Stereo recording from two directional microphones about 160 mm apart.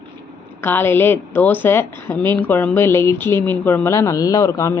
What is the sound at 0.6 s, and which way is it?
A woman's voice, 15° left (ahead or behind).